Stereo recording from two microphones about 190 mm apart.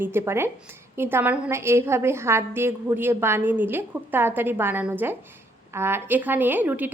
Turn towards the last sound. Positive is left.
turn(degrees=-10)  # may be behind; listen again after turning